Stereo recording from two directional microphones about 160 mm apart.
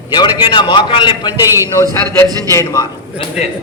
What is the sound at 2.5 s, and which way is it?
Speech, 20° left (ahead or behind).